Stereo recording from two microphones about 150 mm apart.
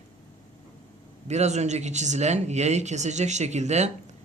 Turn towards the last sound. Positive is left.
turn(degrees=-50)  # may be behind; listen again after turning